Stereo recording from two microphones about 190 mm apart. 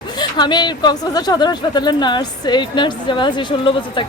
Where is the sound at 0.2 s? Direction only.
20° left (ahead or behind).